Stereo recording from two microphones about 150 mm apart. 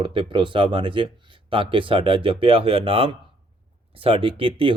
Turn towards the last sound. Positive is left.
turn(degrees=-35)  # may be behind; listen again after turning